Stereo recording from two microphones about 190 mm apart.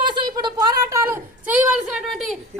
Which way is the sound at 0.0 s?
25° right (ahead or behind).